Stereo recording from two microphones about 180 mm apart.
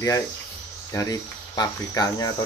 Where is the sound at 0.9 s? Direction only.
20° left (ahead or behind).